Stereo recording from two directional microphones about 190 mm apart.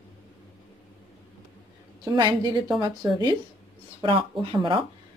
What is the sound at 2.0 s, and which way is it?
Speech, 20° right (ahead or behind).